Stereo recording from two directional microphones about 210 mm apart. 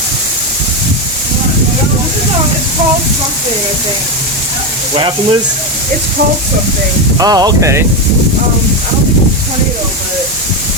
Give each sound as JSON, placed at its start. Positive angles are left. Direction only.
{"t": 4.9, "sound": "speech", "side_deg": -25}
{"t": 7.2, "sound": "speech", "side_deg": -20}